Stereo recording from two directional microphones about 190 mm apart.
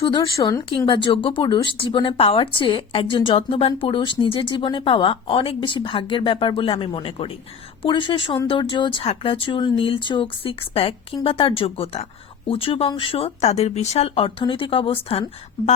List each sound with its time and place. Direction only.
0.0 s speech: 25° left (ahead or behind)